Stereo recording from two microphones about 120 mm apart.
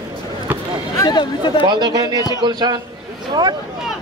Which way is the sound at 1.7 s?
35° right (ahead or behind).